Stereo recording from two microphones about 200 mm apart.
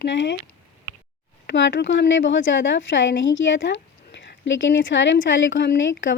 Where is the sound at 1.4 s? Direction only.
60° left (ahead or behind).